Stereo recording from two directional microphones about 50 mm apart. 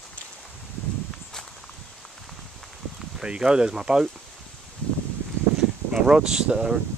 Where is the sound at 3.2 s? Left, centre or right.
Centre.